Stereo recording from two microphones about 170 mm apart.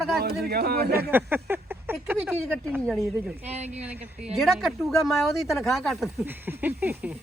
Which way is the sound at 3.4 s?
40° right (ahead or behind).